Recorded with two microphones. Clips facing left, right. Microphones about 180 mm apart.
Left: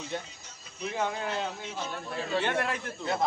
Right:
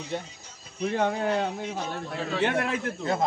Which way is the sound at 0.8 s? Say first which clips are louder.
Right 6 dB; 65° right (ahead or behind).